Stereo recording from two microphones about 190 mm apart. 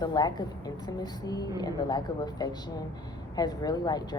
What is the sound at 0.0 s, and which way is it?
A woman's voice, 20° left (ahead or behind).